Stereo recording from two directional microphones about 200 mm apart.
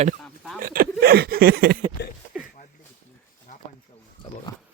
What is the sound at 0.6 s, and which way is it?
Speech, 45° right (ahead or behind).